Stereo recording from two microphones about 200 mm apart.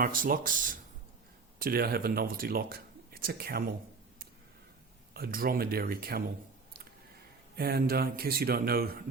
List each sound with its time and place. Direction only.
0.0 s speech: 45° right (ahead or behind)
5.1 s speech: 50° right (ahead or behind)
7.5 s speech: 50° right (ahead or behind)